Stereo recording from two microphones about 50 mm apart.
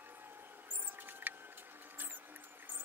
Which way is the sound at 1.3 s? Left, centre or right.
Right.